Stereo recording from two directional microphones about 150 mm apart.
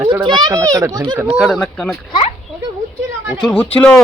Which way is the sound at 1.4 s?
Centre (ahead or behind).